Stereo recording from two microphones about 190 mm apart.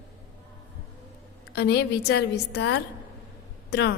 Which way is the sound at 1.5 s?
60° left (ahead or behind).